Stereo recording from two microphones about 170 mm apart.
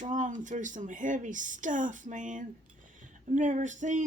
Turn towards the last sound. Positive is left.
turn(degrees=-45)  # may be behind; listen again after turning